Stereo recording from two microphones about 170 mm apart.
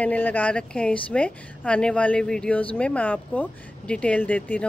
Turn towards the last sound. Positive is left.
turn(degrees=10)  # may be behind; listen again after turning